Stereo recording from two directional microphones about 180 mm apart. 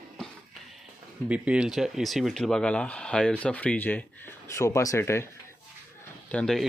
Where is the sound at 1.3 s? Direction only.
5° right (ahead or behind); by 5.3 s 15° left (ahead or behind).